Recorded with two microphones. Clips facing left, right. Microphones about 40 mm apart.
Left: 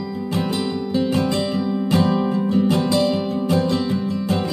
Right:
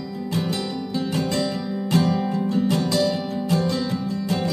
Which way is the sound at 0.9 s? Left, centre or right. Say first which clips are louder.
Left 5 dB; left.